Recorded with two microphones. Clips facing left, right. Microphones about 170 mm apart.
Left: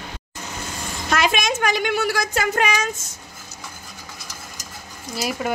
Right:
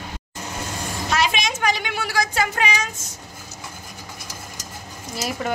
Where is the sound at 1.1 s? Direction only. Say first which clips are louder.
Left 3 dB; 50° left (ahead or behind).